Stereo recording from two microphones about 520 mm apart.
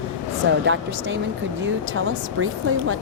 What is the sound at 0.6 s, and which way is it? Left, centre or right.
Speech, right.